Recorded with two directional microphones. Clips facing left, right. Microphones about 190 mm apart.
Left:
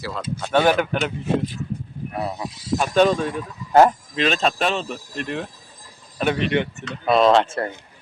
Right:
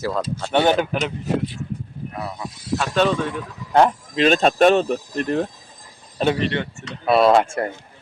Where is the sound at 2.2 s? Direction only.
15° left (ahead or behind).